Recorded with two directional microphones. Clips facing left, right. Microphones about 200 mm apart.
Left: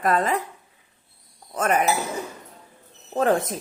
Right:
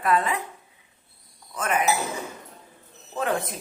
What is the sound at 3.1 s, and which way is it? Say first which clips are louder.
Speech: left 6 dB; 40° left (ahead or behind).